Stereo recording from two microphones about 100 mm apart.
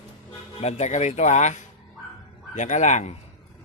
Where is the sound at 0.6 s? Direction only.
90° left.